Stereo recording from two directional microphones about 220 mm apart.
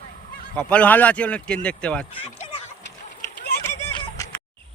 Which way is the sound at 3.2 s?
40° left (ahead or behind).